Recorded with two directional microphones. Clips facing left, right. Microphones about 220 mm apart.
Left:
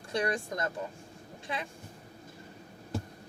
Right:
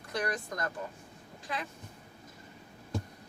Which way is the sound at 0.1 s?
30° left (ahead or behind).